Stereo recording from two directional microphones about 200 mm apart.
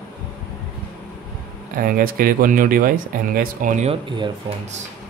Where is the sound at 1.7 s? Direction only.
45° right (ahead or behind); by 4.3 s 25° right (ahead or behind).